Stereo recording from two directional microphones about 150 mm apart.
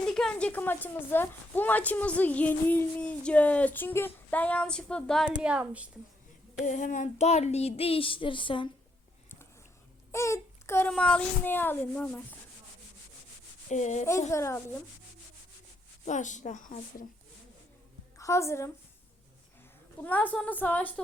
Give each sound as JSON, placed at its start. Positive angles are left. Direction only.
{"t": 0.1, "sound": "a woman's voice", "side_deg": 5}
{"t": 5.4, "sound": "a woman's voice", "side_deg": -5}
{"t": 6.7, "sound": "child singing", "side_deg": 55}
{"t": 10.1, "sound": "a woman's voice", "side_deg": 20}
{"t": 13.7, "sound": "child singing", "side_deg": 50}
{"t": 14.3, "sound": "a woman's voice", "side_deg": 20}
{"t": 16.0, "sound": "a woman's voice", "side_deg": 55}
{"t": 18.2, "sound": "a woman's voice", "side_deg": 20}
{"t": 20.0, "sound": "a woman's voice", "side_deg": 10}